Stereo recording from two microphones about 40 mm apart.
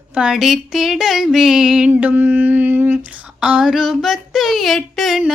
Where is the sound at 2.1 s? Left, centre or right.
Right.